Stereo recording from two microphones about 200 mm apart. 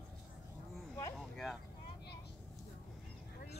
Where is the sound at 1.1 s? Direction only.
Centre (ahead or behind).